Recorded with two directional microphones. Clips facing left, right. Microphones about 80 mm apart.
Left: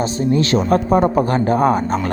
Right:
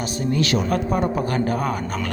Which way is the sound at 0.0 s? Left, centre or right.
Left.